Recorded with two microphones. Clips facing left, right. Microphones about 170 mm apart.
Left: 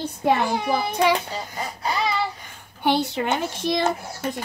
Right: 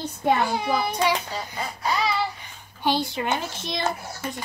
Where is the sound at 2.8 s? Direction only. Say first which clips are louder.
Left 3 dB; 65° left (ahead or behind).